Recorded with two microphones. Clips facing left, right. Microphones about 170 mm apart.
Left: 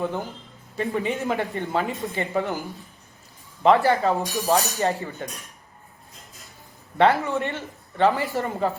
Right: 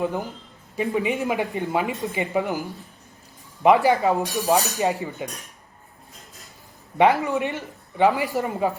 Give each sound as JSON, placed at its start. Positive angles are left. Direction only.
{"t": 0.0, "sound": "speech", "side_deg": -15}
{"t": 3.6, "sound": "speech", "side_deg": -15}
{"t": 6.9, "sound": "speech", "side_deg": -15}